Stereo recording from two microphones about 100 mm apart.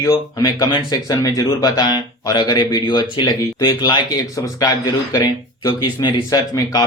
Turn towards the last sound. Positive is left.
turn(degrees=40)  # may be behind; listen again after turning